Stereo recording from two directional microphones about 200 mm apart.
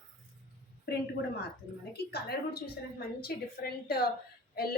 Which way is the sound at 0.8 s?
55° left (ahead or behind).